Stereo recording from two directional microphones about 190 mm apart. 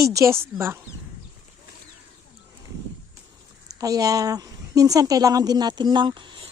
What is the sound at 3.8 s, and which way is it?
A woman's voice, 20° right (ahead or behind).